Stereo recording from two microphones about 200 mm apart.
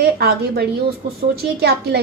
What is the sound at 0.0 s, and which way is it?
A woman's voice, 50° right (ahead or behind).